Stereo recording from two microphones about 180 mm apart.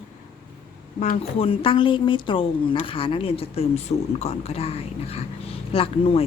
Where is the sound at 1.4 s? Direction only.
30° left (ahead or behind).